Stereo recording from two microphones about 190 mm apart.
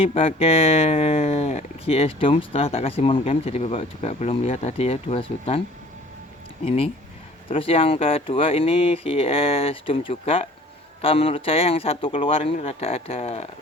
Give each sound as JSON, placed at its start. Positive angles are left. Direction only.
{"t": 0.0, "sound": "speech", "side_deg": 30}
{"t": 6.7, "sound": "speech", "side_deg": 30}